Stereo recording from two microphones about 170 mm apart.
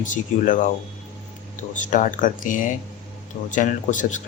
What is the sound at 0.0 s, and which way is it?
Speech, 50° left (ahead or behind).